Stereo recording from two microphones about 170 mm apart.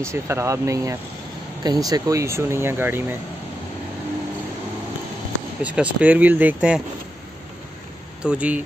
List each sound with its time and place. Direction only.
0.0 s speech: 15° right (ahead or behind)
5.6 s speech: 5° right (ahead or behind)
8.2 s speech: 5° right (ahead or behind)